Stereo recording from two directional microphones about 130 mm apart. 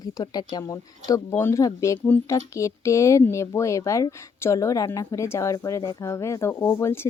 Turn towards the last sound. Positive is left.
turn(degrees=15)  # may be behind; listen again after turning